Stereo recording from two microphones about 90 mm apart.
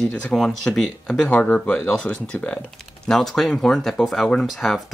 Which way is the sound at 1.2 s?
15° left (ahead or behind).